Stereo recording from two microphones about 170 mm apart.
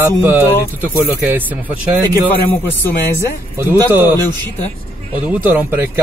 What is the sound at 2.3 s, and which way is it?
Speech, 10° left (ahead or behind).